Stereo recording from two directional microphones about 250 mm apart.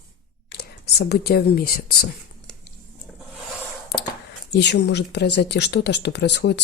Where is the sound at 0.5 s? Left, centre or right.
Left.